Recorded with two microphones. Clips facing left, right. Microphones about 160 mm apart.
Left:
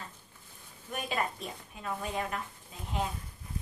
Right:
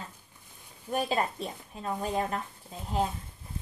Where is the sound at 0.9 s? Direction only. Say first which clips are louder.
Right 5 dB; 35° right (ahead or behind).